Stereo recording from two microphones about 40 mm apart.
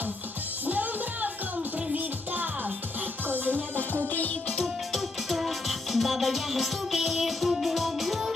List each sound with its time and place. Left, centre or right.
0.7 s music: right
3.3 s music: right
4.1 s music: left
4.6 s music: centre